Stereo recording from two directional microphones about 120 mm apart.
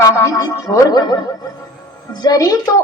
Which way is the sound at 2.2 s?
30° left (ahead or behind).